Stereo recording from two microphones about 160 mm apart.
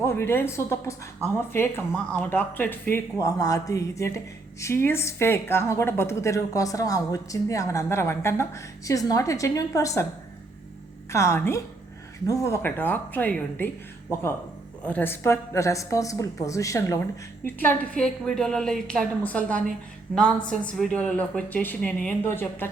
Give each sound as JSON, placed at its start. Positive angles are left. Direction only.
{"t": 0.0, "sound": "a woman's voice", "side_deg": 15}
{"t": 11.1, "sound": "a woman's voice", "side_deg": 20}
{"t": 20.7, "sound": "a woman's voice", "side_deg": 5}